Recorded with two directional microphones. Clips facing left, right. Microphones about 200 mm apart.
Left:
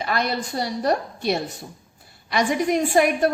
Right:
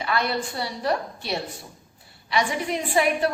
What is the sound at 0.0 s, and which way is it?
A woman's voice, 45° left (ahead or behind).